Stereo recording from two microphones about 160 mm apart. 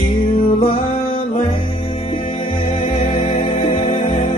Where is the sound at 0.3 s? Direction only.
35° left (ahead or behind).